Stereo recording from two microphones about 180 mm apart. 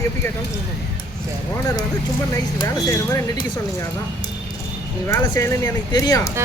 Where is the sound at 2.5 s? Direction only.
15° left (ahead or behind).